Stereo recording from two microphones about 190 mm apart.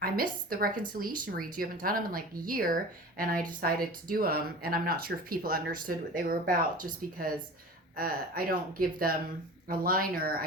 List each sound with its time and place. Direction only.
0.0 s speech: 50° right (ahead or behind)